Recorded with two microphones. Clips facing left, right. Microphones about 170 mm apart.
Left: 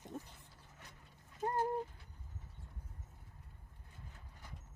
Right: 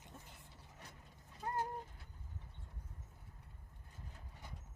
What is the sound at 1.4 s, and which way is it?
Bird, 40° left (ahead or behind).